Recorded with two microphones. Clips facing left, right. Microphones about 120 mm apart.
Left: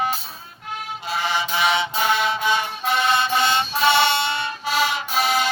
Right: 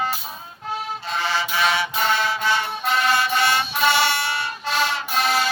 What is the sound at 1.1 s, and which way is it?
Music, 15° left (ahead or behind).